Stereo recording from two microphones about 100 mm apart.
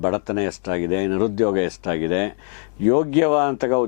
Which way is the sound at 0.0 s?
15° left (ahead or behind).